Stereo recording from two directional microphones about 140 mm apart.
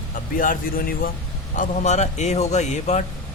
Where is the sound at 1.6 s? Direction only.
60° left (ahead or behind).